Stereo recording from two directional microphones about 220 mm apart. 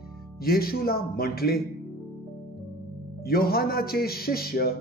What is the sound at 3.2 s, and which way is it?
Speech, 45° left (ahead or behind).